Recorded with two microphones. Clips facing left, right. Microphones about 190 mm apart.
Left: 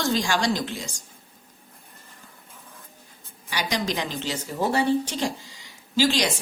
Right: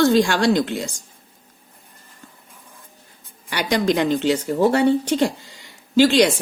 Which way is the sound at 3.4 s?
55° right (ahead or behind).